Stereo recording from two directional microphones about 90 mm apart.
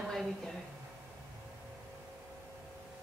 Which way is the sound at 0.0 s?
5° left (ahead or behind).